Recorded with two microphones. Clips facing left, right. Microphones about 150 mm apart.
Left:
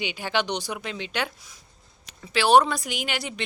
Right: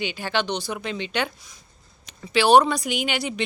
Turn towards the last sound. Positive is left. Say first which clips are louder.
# right 5 dB
turn(degrees=0)  # may be behind; listen again after turning